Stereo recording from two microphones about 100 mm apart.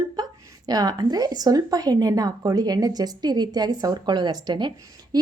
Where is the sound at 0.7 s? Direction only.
40° right (ahead or behind).